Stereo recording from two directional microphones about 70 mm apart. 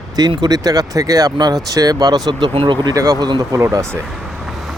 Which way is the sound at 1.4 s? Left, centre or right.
Right.